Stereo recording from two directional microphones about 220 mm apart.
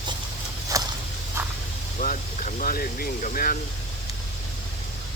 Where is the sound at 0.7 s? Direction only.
15° right (ahead or behind).